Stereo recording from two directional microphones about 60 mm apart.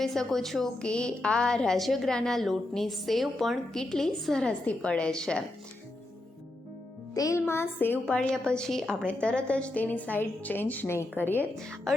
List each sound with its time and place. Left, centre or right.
0.0 s speech: centre
0.8 s a woman's voice: centre
4.6 s a woman's voice: centre
7.1 s a child's voice: left
7.3 s a woman's voice: left
8.3 s a woman's voice: centre; by 11.4 s left
11.5 s a woman's voice: centre